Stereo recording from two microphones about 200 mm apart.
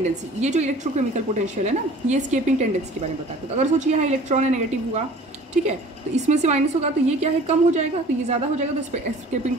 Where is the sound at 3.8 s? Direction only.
35° right (ahead or behind).